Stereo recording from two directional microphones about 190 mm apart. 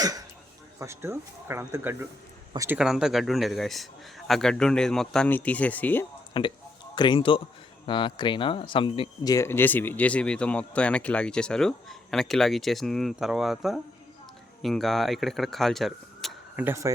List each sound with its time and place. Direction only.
0.0 s a man's voice: 20° right (ahead or behind); by 6.1 s 10° left (ahead or behind)
6.3 s a man's voice: 25° left (ahead or behind); by 16.6 s centre (ahead or behind)
16.6 s speech: 15° right (ahead or behind)